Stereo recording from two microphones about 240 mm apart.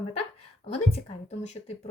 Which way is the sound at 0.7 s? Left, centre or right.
Left.